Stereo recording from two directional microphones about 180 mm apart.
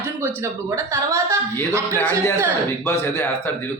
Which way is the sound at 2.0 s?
10° left (ahead or behind).